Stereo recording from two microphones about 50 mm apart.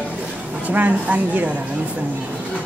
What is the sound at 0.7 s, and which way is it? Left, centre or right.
Speech, right.